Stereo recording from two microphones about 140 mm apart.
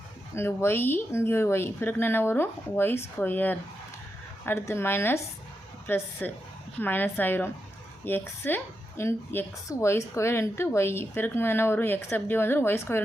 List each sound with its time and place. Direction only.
0.3 s speech: 15° left (ahead or behind)